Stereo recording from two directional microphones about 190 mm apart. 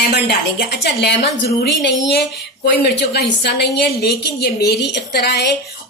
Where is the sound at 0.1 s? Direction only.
60° left (ahead or behind).